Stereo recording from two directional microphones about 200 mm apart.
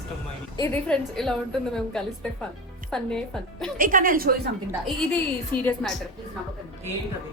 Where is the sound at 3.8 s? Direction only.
45° right (ahead or behind).